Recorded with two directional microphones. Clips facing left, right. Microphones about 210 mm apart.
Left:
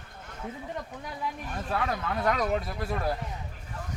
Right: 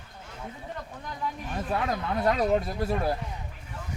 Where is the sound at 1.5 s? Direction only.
20° right (ahead or behind).